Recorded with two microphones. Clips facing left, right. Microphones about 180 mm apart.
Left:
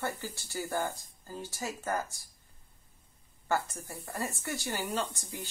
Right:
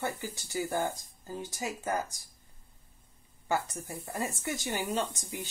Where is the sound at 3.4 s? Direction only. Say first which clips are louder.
Even; 20° right (ahead or behind).